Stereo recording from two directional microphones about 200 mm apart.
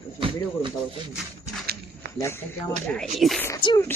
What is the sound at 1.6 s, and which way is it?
Walk, 50° right (ahead or behind).